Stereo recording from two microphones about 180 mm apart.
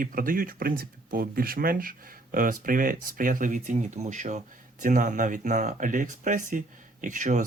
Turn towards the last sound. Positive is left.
turn(degrees=-45)  # may be behind; listen again after turning